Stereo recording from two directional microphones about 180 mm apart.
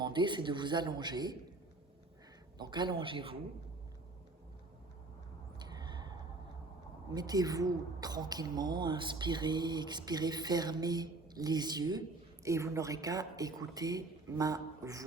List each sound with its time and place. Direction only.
0.0 s a woman's voice: 25° right (ahead or behind)
2.6 s a woman's voice: 25° right (ahead or behind)
5.5 s a sound: 25° right (ahead or behind)
7.1 s a woman's voice: 20° right (ahead or behind)